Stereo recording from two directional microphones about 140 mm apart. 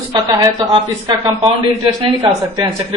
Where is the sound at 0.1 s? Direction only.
30° right (ahead or behind).